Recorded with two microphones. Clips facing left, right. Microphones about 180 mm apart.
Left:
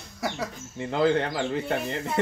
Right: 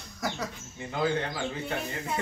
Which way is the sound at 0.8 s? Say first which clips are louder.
Left 6 dB; 80° left.